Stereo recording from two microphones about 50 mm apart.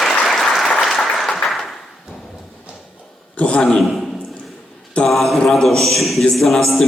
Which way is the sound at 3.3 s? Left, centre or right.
Left.